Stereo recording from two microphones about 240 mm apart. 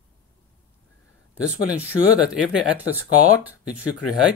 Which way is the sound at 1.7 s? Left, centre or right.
Centre.